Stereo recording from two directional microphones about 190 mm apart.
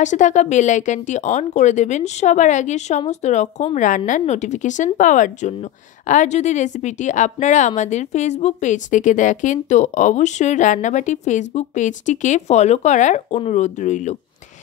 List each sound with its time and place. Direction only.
0.0 s speech: 40° left (ahead or behind)